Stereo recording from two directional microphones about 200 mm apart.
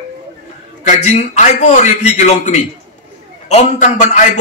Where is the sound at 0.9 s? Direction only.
35° left (ahead or behind).